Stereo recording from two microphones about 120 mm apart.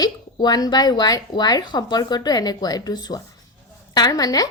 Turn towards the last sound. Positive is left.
turn(degrees=30)  # may be behind; listen again after turning